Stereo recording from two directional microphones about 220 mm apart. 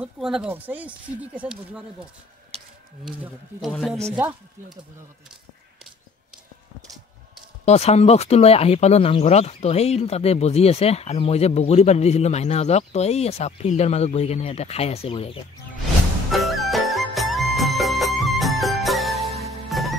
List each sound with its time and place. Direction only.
0.0 s speech: 5° right (ahead or behind)
3.1 s speech: centre (ahead or behind)
7.6 s speech: 30° left (ahead or behind)
16.3 s music: centre (ahead or behind)